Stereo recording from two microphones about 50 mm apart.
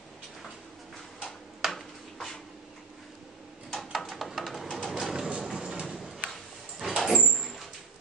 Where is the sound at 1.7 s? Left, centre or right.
Centre.